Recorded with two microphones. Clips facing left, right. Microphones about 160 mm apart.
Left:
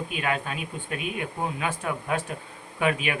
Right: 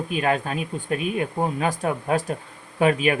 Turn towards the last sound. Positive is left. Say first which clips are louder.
# right 6 dB
turn(degrees=-40)  # may be behind; listen again after turning